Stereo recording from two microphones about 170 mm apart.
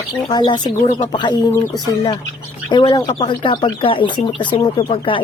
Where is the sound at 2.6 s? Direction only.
25° left (ahead or behind).